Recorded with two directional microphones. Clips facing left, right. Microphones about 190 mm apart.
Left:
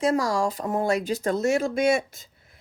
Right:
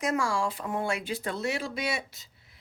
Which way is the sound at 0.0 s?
35° left (ahead or behind).